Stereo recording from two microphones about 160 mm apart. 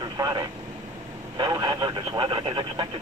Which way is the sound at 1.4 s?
25° right (ahead or behind).